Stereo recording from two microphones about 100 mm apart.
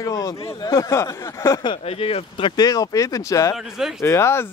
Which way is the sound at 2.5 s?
40° left (ahead or behind).